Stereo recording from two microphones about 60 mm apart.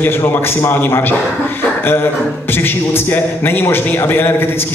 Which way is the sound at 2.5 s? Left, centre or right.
Left.